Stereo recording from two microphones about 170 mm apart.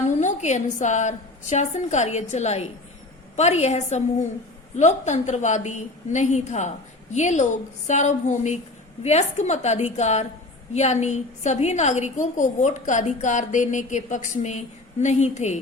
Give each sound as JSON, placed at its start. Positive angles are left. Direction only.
{"t": 0.0, "sound": "a woman's voice", "side_deg": 45}